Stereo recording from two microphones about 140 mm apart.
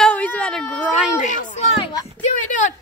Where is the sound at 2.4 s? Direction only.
60° left (ahead or behind).